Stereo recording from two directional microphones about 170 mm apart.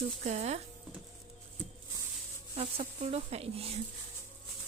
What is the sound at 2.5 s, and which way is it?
Speech, 35° right (ahead or behind).